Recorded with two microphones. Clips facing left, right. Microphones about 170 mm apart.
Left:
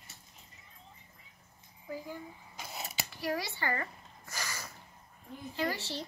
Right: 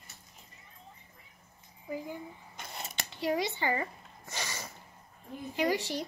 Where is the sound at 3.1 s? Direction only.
20° right (ahead or behind).